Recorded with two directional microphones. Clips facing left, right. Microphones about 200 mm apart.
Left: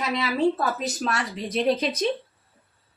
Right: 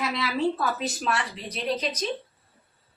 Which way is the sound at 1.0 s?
45° left (ahead or behind).